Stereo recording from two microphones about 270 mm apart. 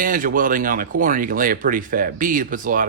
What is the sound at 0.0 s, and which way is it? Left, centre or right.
Speech, right.